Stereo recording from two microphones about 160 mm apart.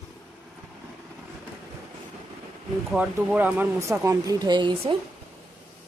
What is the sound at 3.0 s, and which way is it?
Speech, 5° right (ahead or behind).